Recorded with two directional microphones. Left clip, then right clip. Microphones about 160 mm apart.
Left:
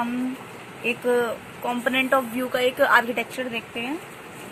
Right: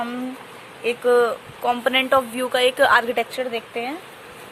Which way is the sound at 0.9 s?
70° right (ahead or behind).